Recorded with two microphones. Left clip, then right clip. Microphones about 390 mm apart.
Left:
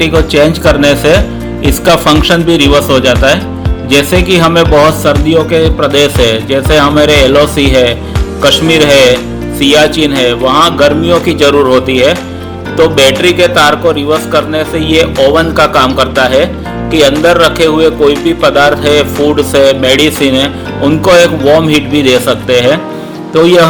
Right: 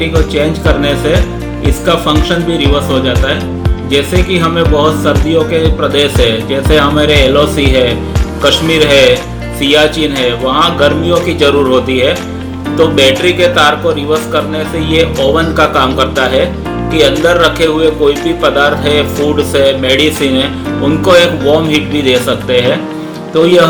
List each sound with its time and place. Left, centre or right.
0.0 s music: left
21.7 s music: left